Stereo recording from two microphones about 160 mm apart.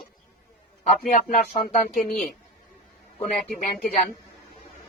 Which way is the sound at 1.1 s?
60° left (ahead or behind).